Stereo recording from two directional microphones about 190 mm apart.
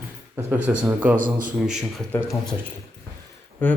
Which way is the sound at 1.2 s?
45° right (ahead or behind).